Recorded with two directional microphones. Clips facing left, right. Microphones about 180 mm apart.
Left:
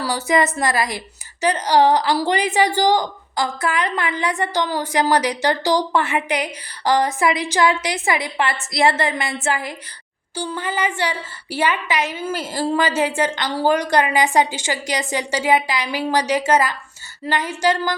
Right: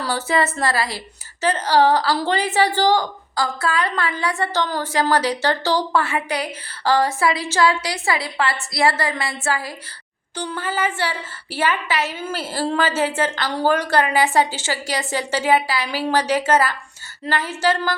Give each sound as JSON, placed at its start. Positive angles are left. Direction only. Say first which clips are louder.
{"t": 0.0, "sound": "a woman's voice", "louder": "left 2 dB", "side_deg": 10}